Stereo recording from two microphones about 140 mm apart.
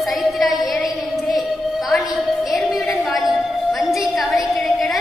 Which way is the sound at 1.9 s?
Centre (ahead or behind).